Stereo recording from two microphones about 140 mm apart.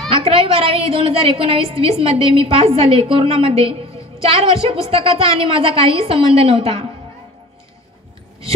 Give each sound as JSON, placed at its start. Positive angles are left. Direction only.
{"t": 0.1, "sound": "a woman's voice", "side_deg": -40}